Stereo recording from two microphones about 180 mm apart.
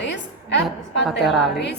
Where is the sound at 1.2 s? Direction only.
Centre (ahead or behind).